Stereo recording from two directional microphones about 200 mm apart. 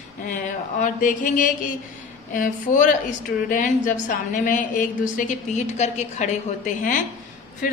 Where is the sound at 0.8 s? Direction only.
40° left (ahead or behind).